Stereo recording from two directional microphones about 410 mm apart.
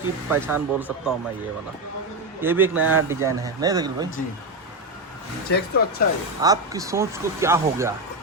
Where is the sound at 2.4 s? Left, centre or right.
Centre.